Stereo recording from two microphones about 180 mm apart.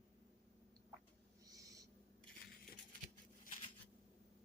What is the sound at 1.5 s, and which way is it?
Owl, 20° right (ahead or behind).